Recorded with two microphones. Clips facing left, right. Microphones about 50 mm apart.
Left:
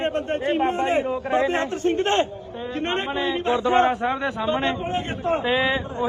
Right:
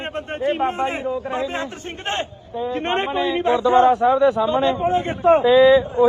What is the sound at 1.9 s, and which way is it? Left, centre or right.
Speech, right.